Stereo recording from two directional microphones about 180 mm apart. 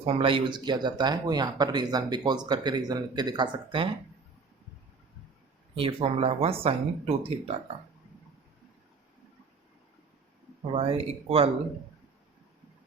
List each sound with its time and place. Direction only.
0.0 s speech: 35° right (ahead or behind)
5.7 s speech: 30° right (ahead or behind)
10.8 s speech: 30° right (ahead or behind)